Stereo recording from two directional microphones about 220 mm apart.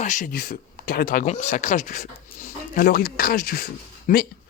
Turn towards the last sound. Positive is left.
turn(degrees=40)  # may be behind; listen again after turning